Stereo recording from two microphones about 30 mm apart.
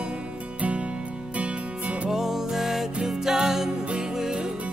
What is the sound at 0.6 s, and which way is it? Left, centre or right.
Music, right.